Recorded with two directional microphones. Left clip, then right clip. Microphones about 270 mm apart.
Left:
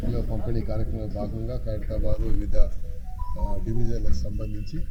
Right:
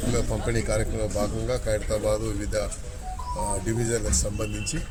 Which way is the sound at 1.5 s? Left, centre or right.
Right.